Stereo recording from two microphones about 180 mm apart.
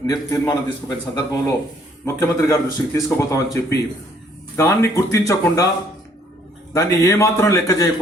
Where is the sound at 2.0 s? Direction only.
15° left (ahead or behind).